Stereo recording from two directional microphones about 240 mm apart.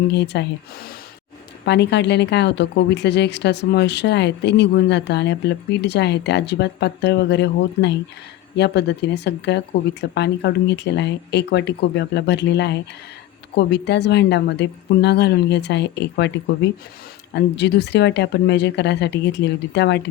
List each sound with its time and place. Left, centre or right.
0.1 s speech: left
1.6 s speech: left
17.3 s speech: left